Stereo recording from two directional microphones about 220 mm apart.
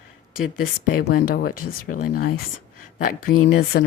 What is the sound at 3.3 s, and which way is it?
Speech, 50° left (ahead or behind).